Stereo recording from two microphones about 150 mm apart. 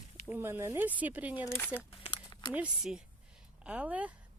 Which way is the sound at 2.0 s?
30° left (ahead or behind).